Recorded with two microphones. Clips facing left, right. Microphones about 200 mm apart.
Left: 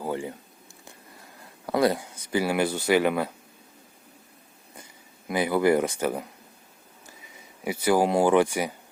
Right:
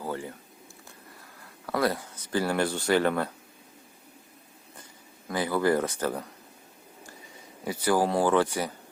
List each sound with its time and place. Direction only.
0.0 s a sound: 20° left (ahead or behind)
1.6 s speech: 20° left (ahead or behind)
5.3 s speech: 15° left (ahead or behind)
7.6 s speech: 10° left (ahead or behind)